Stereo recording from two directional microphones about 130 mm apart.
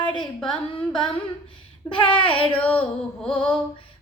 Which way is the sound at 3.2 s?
10° left (ahead or behind).